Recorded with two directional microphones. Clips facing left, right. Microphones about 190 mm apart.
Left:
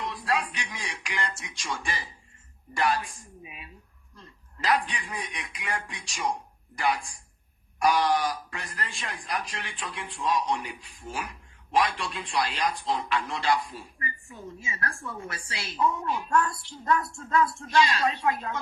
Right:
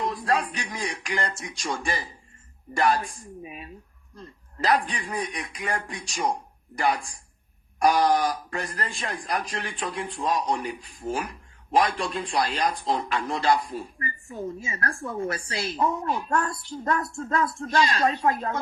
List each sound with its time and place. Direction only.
0.0 s speech: 40° right (ahead or behind)